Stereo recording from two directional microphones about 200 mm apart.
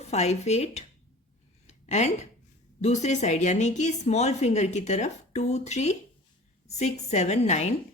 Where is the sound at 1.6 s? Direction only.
35° left (ahead or behind).